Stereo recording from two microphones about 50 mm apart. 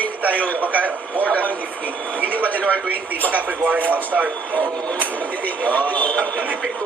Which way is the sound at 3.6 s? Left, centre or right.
Right.